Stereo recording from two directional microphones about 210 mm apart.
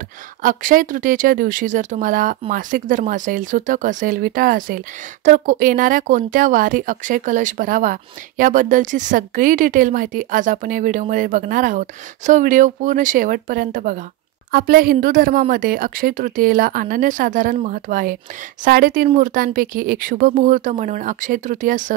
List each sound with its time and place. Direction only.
0.4 s speech: 40° right (ahead or behind)